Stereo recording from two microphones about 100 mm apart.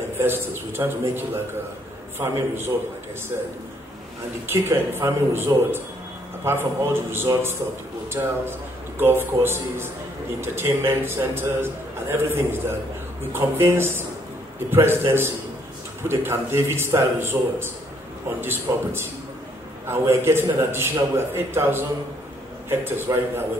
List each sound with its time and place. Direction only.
0.2 s a man's voice: 20° right (ahead or behind)
4.5 s a man's voice: 25° right (ahead or behind)